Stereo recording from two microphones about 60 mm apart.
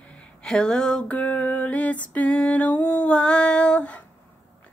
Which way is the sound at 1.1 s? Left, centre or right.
Left.